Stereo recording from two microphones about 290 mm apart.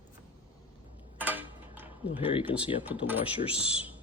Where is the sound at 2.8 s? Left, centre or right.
Centre.